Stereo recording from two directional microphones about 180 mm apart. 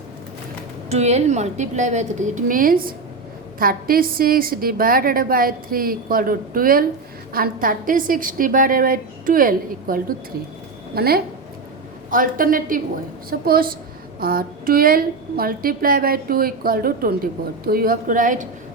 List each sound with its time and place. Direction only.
0.9 s a woman's voice: 35° right (ahead or behind)